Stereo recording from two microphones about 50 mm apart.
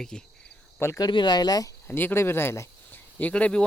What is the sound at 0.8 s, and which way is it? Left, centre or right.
Speech, left.